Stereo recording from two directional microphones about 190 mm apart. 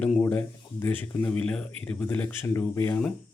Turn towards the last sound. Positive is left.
turn(degrees=10)  # may be behind; listen again after turning